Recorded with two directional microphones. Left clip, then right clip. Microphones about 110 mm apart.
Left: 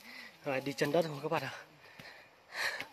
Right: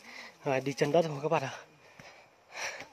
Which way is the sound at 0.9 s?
65° right (ahead or behind).